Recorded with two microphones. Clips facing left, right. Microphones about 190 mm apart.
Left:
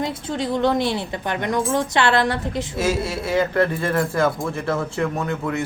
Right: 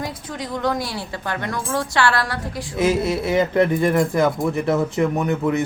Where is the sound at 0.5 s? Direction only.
25° left (ahead or behind).